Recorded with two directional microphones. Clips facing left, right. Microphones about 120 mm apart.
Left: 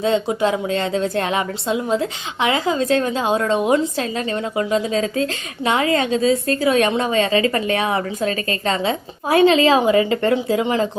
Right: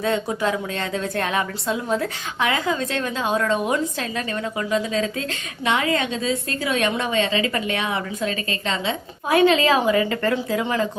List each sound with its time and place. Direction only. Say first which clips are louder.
0.0 s a woman's voice: left 4 dB; 25° left (ahead or behind)